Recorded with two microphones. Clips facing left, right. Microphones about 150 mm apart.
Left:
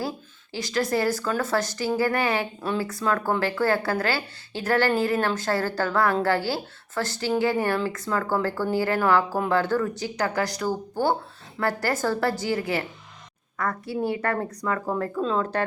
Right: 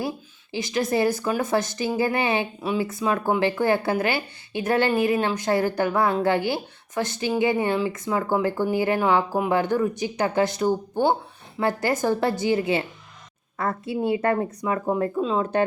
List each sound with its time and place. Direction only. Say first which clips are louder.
0.5 s a woman's voice: right 1 dB; 20° right (ahead or behind)